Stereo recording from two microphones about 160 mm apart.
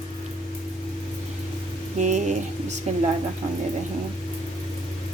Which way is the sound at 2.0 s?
50° right (ahead or behind).